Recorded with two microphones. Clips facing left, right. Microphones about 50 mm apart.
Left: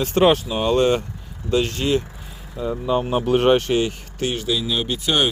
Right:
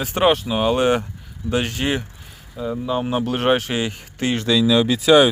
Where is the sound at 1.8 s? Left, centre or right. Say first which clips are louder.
Right 1 dB; right.